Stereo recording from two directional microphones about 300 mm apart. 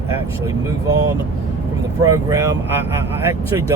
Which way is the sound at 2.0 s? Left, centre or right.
Centre.